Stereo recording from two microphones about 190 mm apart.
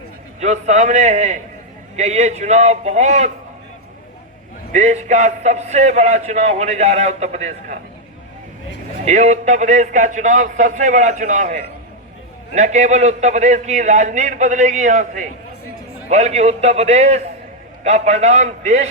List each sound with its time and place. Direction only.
0.3 s a man's voice: 35° right (ahead or behind)
4.7 s a man's voice: 35° right (ahead or behind)
9.0 s a man's voice: 35° right (ahead or behind)